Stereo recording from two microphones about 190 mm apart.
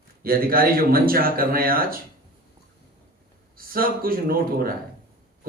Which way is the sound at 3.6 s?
50° right (ahead or behind).